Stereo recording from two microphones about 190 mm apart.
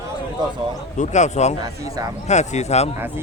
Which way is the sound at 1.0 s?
40° left (ahead or behind).